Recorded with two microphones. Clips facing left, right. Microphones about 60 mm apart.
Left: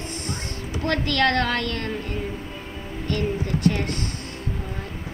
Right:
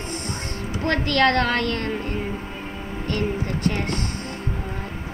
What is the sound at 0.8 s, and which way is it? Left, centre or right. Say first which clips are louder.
A woman's voice: right 2 dB; right.